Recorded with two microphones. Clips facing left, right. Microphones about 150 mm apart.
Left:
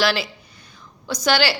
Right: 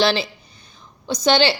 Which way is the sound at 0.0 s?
25° right (ahead or behind).